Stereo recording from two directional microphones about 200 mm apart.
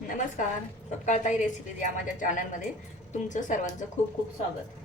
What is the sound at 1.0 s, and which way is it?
A woman's voice, 35° left (ahead or behind).